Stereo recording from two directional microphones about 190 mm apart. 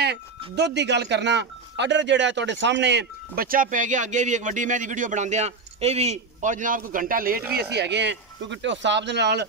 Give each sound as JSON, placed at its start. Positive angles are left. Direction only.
{"t": 0.6, "sound": "a man's voice", "side_deg": -65}
{"t": 7.5, "sound": "speech", "side_deg": -65}